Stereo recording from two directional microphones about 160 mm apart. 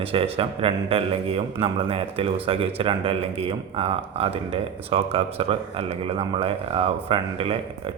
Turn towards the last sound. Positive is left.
turn(degrees=-35)  # may be behind; listen again after turning